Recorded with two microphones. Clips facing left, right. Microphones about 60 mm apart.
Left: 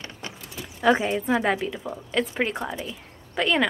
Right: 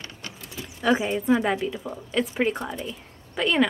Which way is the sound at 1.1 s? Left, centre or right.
Centre.